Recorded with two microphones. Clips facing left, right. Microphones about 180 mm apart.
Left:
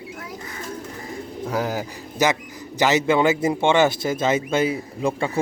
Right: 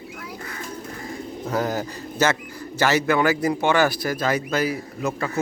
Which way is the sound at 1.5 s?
10° left (ahead or behind).